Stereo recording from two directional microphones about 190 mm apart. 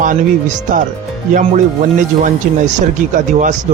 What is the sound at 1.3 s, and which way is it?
Speech, 40° right (ahead or behind).